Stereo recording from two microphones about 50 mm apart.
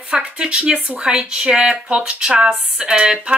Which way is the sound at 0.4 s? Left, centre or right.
Centre.